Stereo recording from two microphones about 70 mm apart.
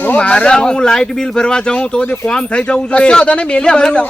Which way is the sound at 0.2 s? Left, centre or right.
Centre.